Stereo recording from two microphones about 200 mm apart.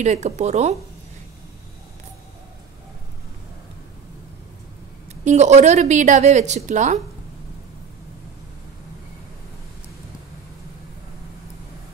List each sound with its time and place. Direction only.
0.0 s a woman's voice: 35° right (ahead or behind)
5.2 s a woman's voice: 35° right (ahead or behind)